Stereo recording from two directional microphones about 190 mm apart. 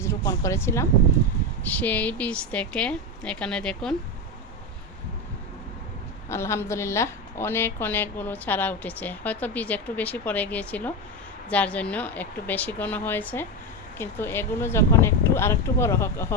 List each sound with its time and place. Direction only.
0.0 s a woman's voice: 15° left (ahead or behind)
6.2 s a woman's voice: 15° left (ahead or behind)